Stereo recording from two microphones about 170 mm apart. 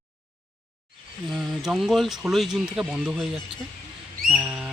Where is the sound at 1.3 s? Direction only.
Centre (ahead or behind).